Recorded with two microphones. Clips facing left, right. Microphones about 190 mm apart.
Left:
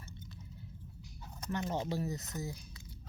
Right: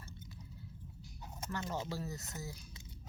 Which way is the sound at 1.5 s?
20° left (ahead or behind).